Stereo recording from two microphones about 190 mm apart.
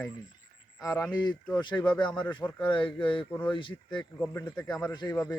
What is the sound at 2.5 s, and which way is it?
Speech, 25° left (ahead or behind).